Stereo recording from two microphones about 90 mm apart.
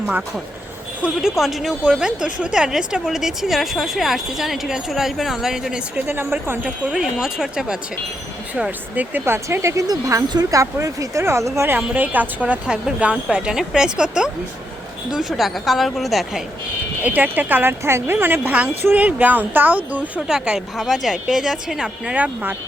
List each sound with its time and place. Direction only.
0.0 s speech: 20° right (ahead or behind)
1.0 s speech: 5° right (ahead or behind)
6.1 s speech: 25° right (ahead or behind)
9.1 s speech: 25° right (ahead or behind)
9.8 s speech: 45° right (ahead or behind)
11.9 s speech: 20° right (ahead or behind); by 16.4 s centre (ahead or behind)
17.0 s speech: 20° right (ahead or behind)